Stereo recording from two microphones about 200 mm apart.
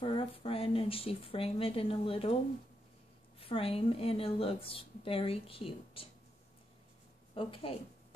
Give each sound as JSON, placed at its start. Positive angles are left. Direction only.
{"t": 0.0, "sound": "a woman's voice", "side_deg": 25}
{"t": 3.3, "sound": "a woman's voice", "side_deg": 30}
{"t": 7.3, "sound": "a woman's voice", "side_deg": 25}